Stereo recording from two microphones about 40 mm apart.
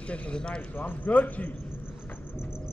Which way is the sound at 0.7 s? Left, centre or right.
Left.